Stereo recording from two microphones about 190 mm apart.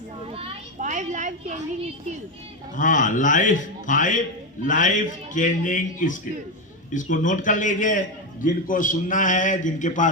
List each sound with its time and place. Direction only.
0.3 s children playing: 30° right (ahead or behind)
2.7 s a man's voice: 45° left (ahead or behind)